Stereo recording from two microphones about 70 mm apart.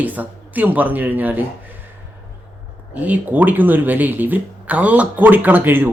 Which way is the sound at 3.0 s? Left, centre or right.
Right.